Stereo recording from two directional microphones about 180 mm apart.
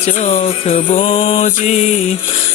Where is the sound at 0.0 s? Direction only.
35° left (ahead or behind).